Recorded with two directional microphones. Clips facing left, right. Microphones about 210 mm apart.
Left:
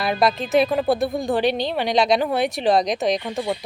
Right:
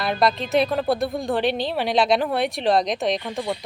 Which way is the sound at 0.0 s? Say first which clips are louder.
Left 1 dB; centre (ahead or behind).